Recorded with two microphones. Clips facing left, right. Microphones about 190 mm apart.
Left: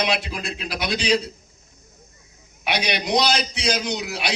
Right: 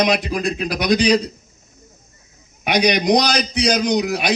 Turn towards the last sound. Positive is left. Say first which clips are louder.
# right 8 dB
turn(degrees=-40)  # may be behind; listen again after turning